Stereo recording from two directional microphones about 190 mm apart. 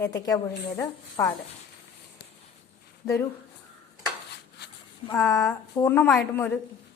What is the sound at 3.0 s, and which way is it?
Speech, 20° left (ahead or behind).